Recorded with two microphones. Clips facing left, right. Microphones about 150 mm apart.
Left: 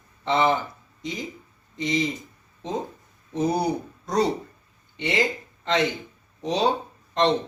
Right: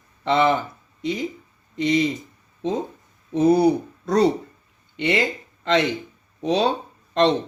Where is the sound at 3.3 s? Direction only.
65° right (ahead or behind).